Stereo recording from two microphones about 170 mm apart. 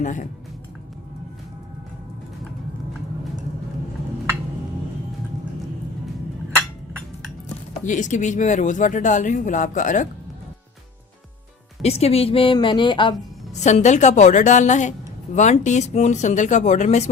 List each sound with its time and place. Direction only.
0.0 s speech: 45° left (ahead or behind)
7.9 s speech: 45° left (ahead or behind)
11.8 s a woman's voice: 35° left (ahead or behind)
13.5 s speech: 40° left (ahead or behind)